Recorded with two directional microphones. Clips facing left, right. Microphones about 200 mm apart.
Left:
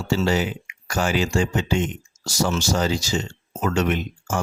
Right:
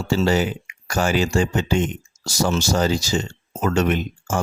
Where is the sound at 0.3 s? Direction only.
40° right (ahead or behind).